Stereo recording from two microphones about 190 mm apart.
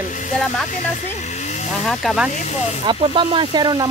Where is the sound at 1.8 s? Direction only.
Centre (ahead or behind).